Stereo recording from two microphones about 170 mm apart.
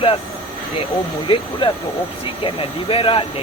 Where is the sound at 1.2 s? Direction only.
30° left (ahead or behind).